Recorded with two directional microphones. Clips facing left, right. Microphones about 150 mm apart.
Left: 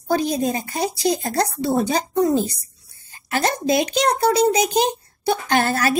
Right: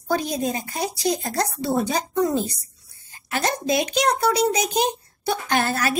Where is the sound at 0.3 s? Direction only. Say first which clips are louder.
Left 3 dB; 30° left (ahead or behind).